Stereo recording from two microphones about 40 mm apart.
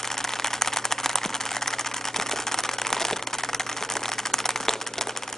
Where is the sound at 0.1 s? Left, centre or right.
Centre.